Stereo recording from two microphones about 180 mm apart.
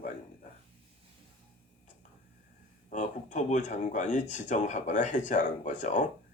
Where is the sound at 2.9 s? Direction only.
40° left (ahead or behind).